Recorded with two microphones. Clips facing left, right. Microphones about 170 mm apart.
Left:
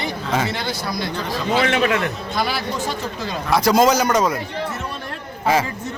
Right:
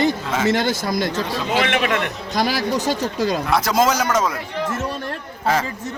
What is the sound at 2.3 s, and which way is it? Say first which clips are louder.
Speech: right 5 dB; 40° right (ahead or behind).